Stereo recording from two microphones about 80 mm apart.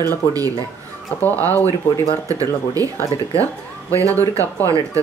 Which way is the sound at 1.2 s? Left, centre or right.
Left.